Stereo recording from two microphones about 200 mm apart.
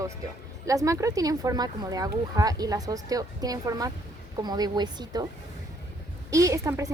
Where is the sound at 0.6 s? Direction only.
15° right (ahead or behind).